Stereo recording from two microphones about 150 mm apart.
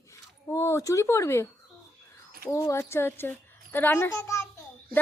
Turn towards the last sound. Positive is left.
turn(degrees=20)  # may be behind; listen again after turning